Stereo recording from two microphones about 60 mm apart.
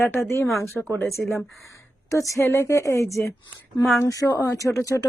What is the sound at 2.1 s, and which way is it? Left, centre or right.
Speech, left.